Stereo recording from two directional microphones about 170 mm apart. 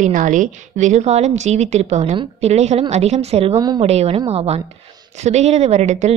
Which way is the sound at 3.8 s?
40° right (ahead or behind).